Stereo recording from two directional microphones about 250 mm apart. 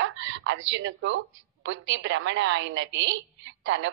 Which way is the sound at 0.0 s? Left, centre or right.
Right.